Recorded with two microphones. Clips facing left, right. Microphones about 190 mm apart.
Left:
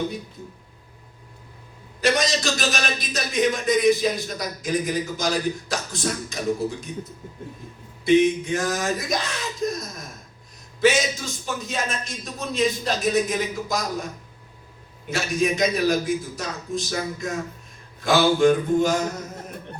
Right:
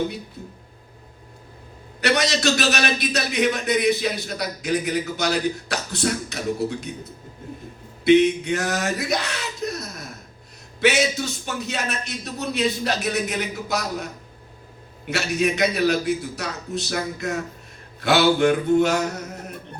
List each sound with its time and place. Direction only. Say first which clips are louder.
2.0 s a man's voice: even; 65° right (ahead or behind)
15.1 s a man's voice: right 1 dB; 65° right (ahead or behind)